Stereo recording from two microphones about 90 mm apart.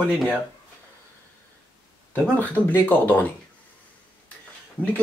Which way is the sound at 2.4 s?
20° left (ahead or behind).